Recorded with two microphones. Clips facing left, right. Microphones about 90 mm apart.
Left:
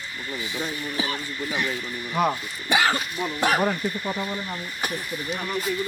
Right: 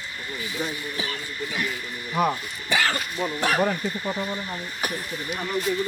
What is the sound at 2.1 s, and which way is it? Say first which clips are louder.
Speech: even; centre (ahead or behind).